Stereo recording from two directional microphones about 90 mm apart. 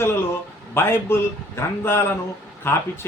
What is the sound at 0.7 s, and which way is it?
A man's voice, 25° left (ahead or behind).